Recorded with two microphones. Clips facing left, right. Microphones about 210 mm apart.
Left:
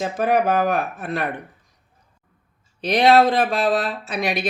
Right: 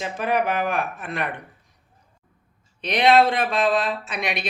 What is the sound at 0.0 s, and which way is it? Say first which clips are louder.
Speech: left 4 dB; 40° left (ahead or behind).